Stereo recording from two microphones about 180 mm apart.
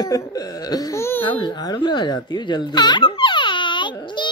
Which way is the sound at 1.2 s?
25° left (ahead or behind).